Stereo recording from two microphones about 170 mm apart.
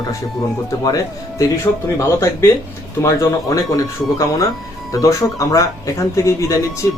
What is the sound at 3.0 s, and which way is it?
Speech, 20° left (ahead or behind).